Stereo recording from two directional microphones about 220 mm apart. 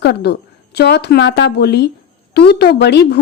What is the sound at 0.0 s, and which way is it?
A woman's voice, 50° left (ahead or behind).